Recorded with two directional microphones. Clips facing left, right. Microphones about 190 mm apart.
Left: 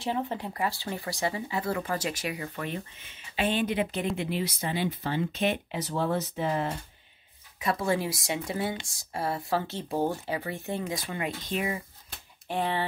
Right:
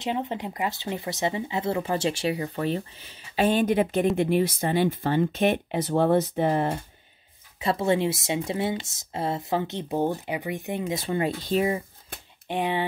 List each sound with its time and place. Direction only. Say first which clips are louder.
0.0 s speech: right 2 dB; 20° right (ahead or behind); by 6.7 s 55° right (ahead or behind)
7.5 s speech: right 4 dB; 25° right (ahead or behind)
11.1 s speech: right 7 dB; 30° right (ahead or behind)
12.4 s speech: right 3 dB; 15° right (ahead or behind)